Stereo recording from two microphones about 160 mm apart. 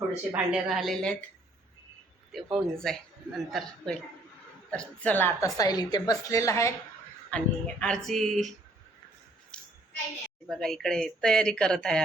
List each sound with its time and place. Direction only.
0.3 s a woman's voice: 5° right (ahead or behind)
2.3 s a woman's voice: centre (ahead or behind)
5.5 s a woman's voice: 25° left (ahead or behind)
7.3 s a woman's voice: 5° left (ahead or behind)
9.5 s child singing: 5° left (ahead or behind)
10.5 s a woman's voice: 5° left (ahead or behind)